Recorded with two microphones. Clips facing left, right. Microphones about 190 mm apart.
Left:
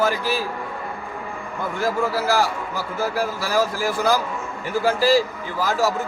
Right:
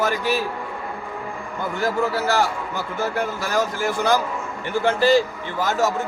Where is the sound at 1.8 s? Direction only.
Centre (ahead or behind).